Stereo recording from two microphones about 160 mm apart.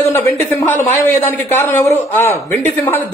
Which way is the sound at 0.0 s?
15° left (ahead or behind).